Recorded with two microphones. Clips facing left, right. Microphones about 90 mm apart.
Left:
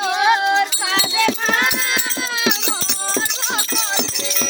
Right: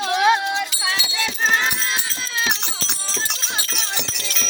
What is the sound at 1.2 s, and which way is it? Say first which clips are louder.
Music: right 2 dB; 65° left (ahead or behind).